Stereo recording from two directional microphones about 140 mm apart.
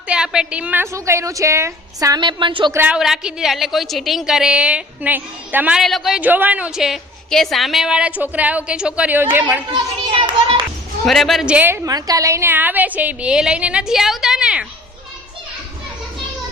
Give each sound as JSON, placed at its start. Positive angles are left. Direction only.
{"t": 0.1, "sound": "a woman's voice", "side_deg": -5}
{"t": 2.7, "sound": "a woman's voice", "side_deg": -10}
{"t": 5.8, "sound": "a woman's voice", "side_deg": 0}
{"t": 9.7, "sound": "children playing", "side_deg": -40}
{"t": 11.0, "sound": "a woman's voice", "side_deg": 0}